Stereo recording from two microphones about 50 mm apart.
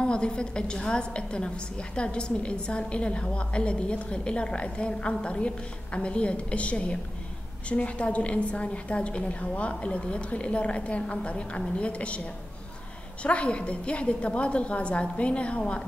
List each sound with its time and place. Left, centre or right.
0.0 s a woman's voice: centre
13.2 s a woman's voice: left